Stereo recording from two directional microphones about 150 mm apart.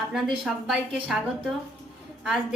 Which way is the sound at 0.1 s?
Centre (ahead or behind).